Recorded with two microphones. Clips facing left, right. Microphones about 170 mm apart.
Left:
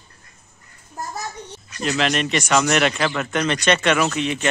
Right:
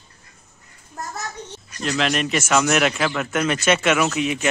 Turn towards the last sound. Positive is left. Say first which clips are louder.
# even
turn(degrees=-5)  # may be behind; listen again after turning